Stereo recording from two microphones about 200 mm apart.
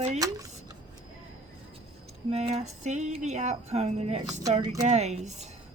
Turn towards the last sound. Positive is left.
turn(degrees=-35)  # may be behind; listen again after turning